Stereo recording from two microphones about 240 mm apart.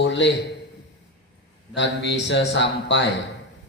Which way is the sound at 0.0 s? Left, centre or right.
Left.